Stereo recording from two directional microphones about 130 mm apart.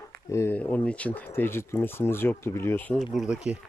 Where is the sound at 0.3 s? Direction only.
20° left (ahead or behind).